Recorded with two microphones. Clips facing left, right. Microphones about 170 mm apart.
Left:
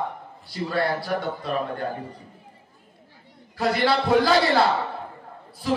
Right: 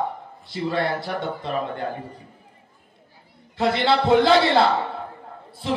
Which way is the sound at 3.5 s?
25° right (ahead or behind).